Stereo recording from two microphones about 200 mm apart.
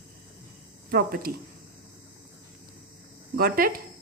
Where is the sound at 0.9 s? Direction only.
45° right (ahead or behind).